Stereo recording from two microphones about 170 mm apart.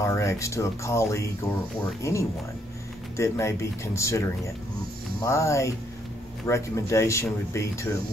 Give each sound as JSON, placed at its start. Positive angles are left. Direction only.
{"t": 0.0, "sound": "speech", "side_deg": 15}
{"t": 5.2, "sound": "speech", "side_deg": 15}